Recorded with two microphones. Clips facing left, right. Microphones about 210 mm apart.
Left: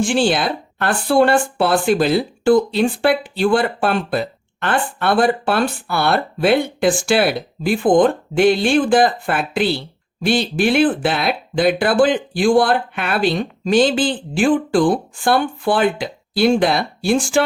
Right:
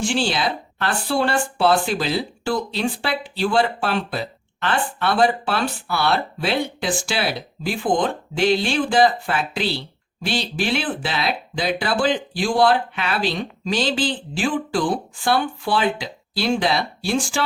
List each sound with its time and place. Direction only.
0.0 s speech: 50° left (ahead or behind)